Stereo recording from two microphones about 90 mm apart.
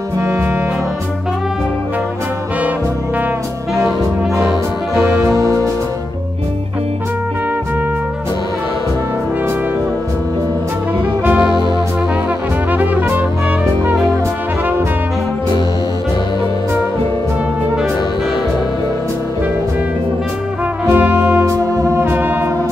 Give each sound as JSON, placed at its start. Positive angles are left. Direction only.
{"t": 0.2, "sound": "music", "side_deg": -30}
{"t": 5.2, "sound": "music", "side_deg": -40}
{"t": 12.7, "sound": "trumpet", "side_deg": -20}
{"t": 20.8, "sound": "music", "side_deg": -25}